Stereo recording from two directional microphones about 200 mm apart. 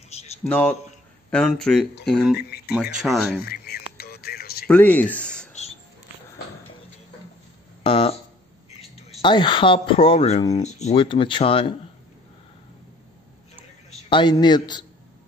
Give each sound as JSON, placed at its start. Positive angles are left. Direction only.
{"t": 0.1, "sound": "a sound", "side_deg": 30}
{"t": 0.5, "sound": "speech", "side_deg": 5}
{"t": 2.3, "sound": "speech", "side_deg": 55}
{"t": 3.0, "sound": "speech", "side_deg": 0}
{"t": 3.4, "sound": "a sound", "side_deg": 50}
{"t": 4.6, "sound": "speech", "side_deg": 10}
{"t": 7.8, "sound": "speech", "side_deg": 30}
{"t": 9.2, "sound": "speech", "side_deg": 25}
{"t": 13.8, "sound": "a man's voice", "side_deg": 25}